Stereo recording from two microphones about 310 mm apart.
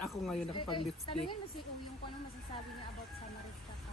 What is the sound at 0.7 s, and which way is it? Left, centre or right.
Speech, centre.